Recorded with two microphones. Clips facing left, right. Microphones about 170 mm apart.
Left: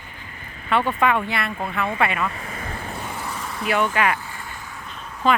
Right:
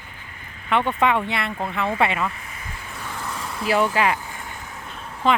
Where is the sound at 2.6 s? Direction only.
55° left (ahead or behind).